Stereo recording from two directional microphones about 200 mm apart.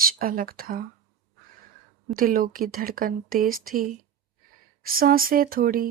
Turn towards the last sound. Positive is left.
turn(degrees=-45)  # may be behind; listen again after turning